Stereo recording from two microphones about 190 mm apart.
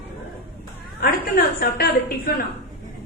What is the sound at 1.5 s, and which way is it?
Speech, 55° left (ahead or behind).